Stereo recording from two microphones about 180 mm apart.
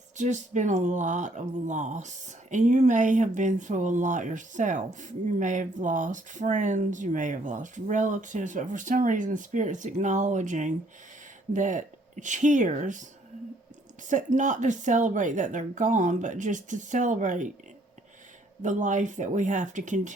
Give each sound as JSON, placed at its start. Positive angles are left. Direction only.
{"t": 0.2, "sound": "speech", "side_deg": -40}
{"t": 14.1, "sound": "speech", "side_deg": -45}
{"t": 18.6, "sound": "speech", "side_deg": -45}